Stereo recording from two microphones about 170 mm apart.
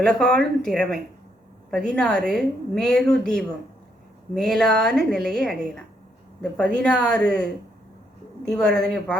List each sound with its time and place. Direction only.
0.0 s a woman's voice: 5° left (ahead or behind)